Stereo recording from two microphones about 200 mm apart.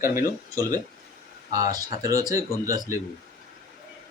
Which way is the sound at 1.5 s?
20° right (ahead or behind).